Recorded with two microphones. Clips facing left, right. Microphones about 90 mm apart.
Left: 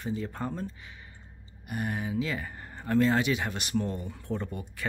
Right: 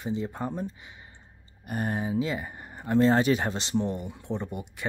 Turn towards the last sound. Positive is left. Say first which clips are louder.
# right 1 dB
turn(degrees=-20)  # may be behind; listen again after turning